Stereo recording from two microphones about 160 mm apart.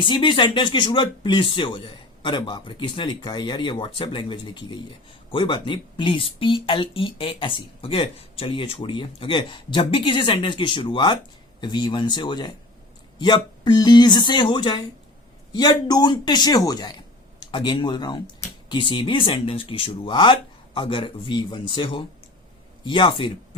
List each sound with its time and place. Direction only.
0.0 s a woman's voice: 30° left (ahead or behind)